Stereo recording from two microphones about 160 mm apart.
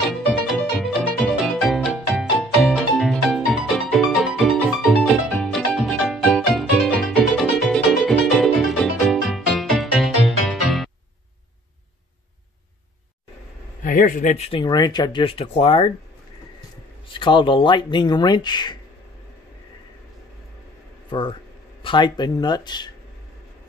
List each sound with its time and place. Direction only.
0.1 s music: centre (ahead or behind)
13.8 s speech: 55° left (ahead or behind); by 15.9 s 35° left (ahead or behind)
17.1 s speech: 30° left (ahead or behind)
21.1 s speech: 30° left (ahead or behind)